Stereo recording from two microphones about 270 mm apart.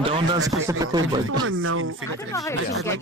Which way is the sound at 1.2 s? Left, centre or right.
Right.